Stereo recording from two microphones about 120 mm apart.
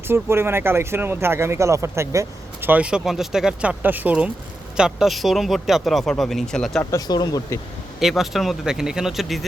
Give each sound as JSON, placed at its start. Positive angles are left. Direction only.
{"t": 0.1, "sound": "speech", "side_deg": -20}
{"t": 6.9, "sound": "speech", "side_deg": 35}
{"t": 7.9, "sound": "speech", "side_deg": 0}